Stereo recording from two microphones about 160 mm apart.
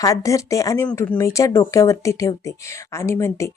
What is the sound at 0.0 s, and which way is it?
Speech, 20° left (ahead or behind).